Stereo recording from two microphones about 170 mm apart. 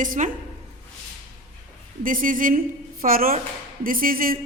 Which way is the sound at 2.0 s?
55° right (ahead or behind).